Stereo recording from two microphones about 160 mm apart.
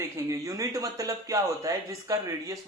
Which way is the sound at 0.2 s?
20° right (ahead or behind).